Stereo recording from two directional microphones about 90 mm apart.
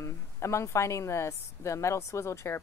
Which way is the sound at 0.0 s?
30° left (ahead or behind).